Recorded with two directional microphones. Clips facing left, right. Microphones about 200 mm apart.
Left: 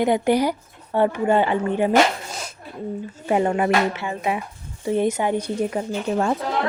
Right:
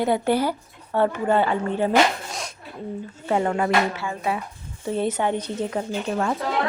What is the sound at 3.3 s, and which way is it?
Speech, 15° left (ahead or behind).